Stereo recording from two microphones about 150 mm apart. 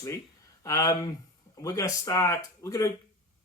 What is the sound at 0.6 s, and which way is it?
Speech, 25° left (ahead or behind).